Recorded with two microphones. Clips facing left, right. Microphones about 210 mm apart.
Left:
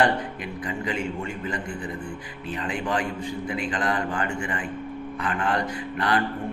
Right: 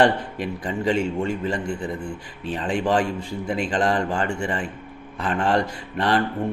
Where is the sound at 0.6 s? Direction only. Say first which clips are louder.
Right 6 dB; 30° right (ahead or behind).